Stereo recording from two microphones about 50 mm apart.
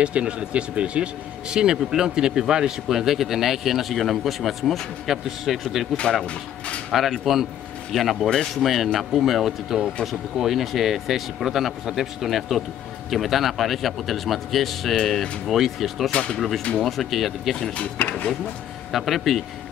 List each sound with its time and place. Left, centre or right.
0.0 s speech: right
6.9 s a man's voice: centre
16.1 s speech: left
16.3 s a man's voice: centre
18.0 s speech: left
18.9 s a man's voice: centre